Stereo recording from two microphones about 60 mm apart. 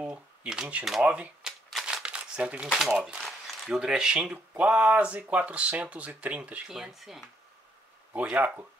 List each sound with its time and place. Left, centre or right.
0.1 s a sound: centre
1.0 s speech: right
1.4 s shuffling cards: centre
2.0 s crumpling: centre
2.8 s speech: centre
3.2 s a sound: centre
3.8 s speech: centre
4.6 s speech: right
6.7 s speech: centre
8.1 s speech: right